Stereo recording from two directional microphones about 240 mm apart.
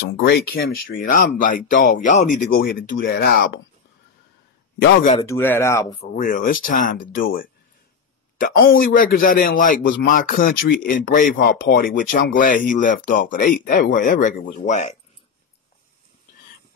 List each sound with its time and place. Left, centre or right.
0.3 s a man's voice: left
4.8 s a man's voice: left
5.2 s speech: centre
6.1 s a man's voice: left